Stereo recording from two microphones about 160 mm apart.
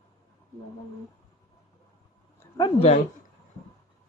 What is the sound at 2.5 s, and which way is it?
Speech, 30° left (ahead or behind).